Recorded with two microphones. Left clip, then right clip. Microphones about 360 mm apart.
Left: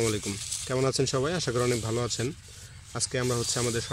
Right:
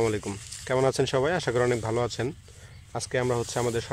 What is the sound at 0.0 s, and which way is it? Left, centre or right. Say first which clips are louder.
Speech: right 2 dB; right.